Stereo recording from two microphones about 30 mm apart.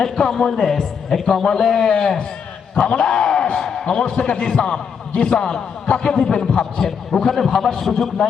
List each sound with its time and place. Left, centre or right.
0.0 s a man's voice: centre
2.7 s a man's voice: left
4.5 s a man's voice: left
6.7 s a man's voice: centre